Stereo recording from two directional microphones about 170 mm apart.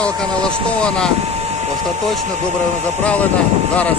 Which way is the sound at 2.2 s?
45° right (ahead or behind).